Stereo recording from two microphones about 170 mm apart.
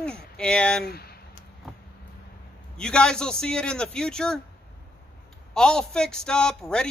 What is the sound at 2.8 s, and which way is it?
A man's voice, 5° left (ahead or behind).